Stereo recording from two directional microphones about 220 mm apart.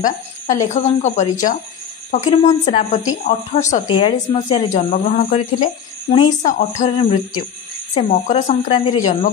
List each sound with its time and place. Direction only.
0.0 s a woman's voice: 35° left (ahead or behind)